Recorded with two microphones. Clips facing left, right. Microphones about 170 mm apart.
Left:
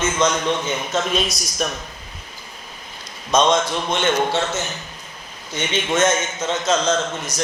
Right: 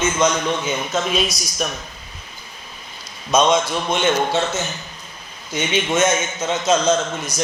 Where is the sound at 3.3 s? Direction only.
5° right (ahead or behind).